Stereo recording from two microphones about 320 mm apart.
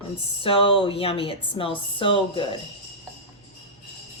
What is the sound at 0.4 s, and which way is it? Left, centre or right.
Speech, centre.